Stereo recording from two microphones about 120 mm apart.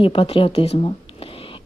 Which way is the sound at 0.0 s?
50° left (ahead or behind).